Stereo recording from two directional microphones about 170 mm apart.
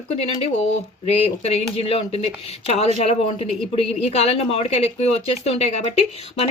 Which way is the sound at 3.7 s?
40° left (ahead or behind).